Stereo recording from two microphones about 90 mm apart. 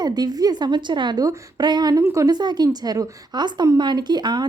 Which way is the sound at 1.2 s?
45° right (ahead or behind).